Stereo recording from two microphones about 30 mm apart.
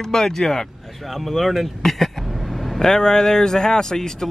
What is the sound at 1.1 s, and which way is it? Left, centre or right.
Speech, centre.